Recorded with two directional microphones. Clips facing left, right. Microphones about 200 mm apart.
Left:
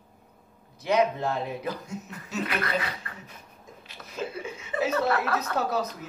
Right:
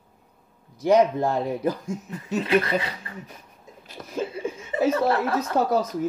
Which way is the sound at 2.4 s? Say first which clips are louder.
Right 7 dB; 25° right (ahead or behind).